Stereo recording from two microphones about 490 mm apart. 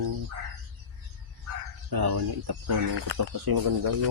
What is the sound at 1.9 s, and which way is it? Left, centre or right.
Speech, right.